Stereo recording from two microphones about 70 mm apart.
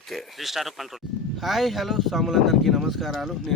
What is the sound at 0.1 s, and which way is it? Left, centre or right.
Speech, centre.